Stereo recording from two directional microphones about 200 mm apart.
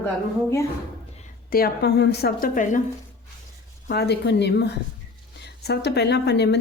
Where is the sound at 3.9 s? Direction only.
55° left (ahead or behind).